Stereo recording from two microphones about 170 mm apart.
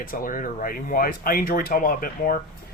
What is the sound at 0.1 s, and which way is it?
Speech, 55° left (ahead or behind).